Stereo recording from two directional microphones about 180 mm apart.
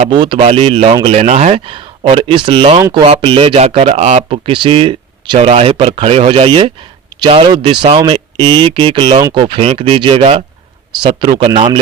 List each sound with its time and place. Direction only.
0.0 s speech: 30° right (ahead or behind)